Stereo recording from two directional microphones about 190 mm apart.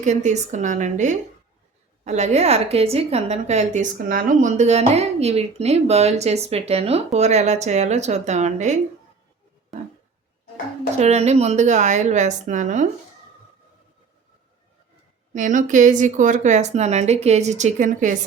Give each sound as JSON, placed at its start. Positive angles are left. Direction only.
{"t": 0.0, "sound": "a woman's voice", "side_deg": -40}
{"t": 11.0, "sound": "a woman's voice", "side_deg": -35}
{"t": 15.3, "sound": "a woman's voice", "side_deg": -40}